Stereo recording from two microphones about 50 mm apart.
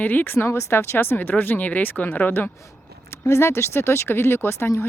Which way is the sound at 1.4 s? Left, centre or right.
Left.